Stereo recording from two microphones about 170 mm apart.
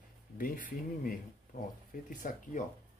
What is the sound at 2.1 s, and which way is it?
Speech, 50° left (ahead or behind).